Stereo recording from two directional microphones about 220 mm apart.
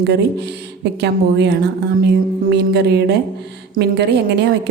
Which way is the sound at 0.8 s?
50° right (ahead or behind).